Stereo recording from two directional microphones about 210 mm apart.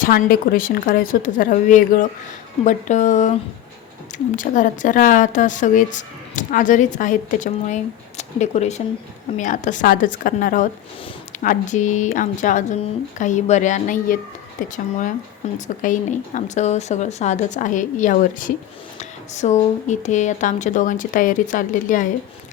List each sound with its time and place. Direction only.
0.0 s speech: 45° left (ahead or behind)
4.4 s speech: 40° left (ahead or behind)